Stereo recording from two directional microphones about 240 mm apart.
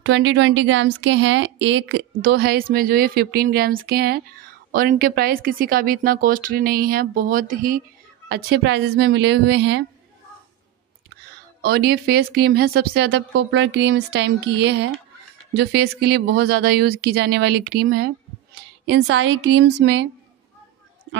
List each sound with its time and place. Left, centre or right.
0.0 s a woman's voice: right
11.6 s a woman's voice: right